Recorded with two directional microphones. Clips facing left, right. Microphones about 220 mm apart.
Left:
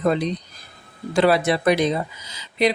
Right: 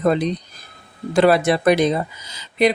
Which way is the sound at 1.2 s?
50° right (ahead or behind).